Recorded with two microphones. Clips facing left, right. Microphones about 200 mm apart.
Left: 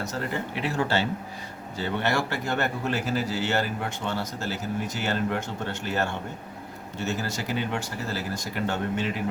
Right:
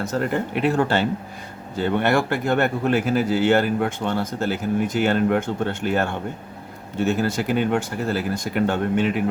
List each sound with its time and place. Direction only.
0.0 s speech: 55° right (ahead or behind)